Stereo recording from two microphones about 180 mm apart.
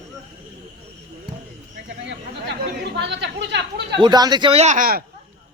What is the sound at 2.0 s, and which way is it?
Chatter, 70° right (ahead or behind).